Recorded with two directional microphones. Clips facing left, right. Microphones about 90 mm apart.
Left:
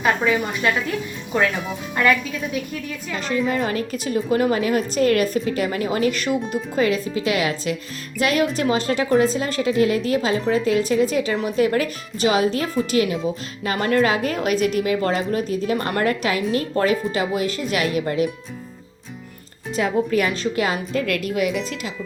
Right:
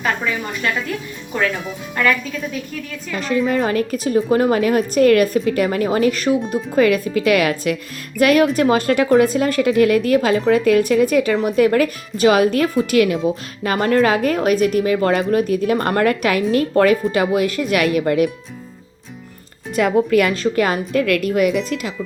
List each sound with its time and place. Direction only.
3.2 s a woman's voice: 40° right (ahead or behind)
6.5 s a woman's voice: 50° right (ahead or behind)
13.7 s a woman's voice: 40° right (ahead or behind); by 15.7 s 55° right (ahead or behind)
15.7 s a woman's voice: 40° right (ahead or behind)
19.7 s speech: 75° right (ahead or behind)
20.3 s a woman's voice: 45° right (ahead or behind)